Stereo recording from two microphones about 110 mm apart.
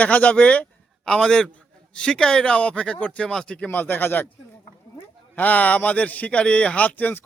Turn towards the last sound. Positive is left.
turn(degrees=15)  # may be behind; listen again after turning